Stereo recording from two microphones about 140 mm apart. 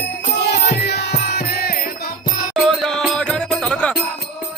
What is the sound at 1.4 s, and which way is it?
Music, 90° left.